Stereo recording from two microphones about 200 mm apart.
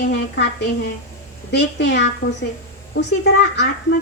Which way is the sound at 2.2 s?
45° left (ahead or behind).